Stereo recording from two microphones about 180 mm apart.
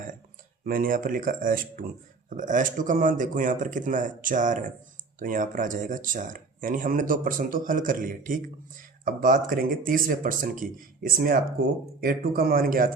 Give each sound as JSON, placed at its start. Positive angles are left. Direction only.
{"t": 0.6, "sound": "speech", "side_deg": -50}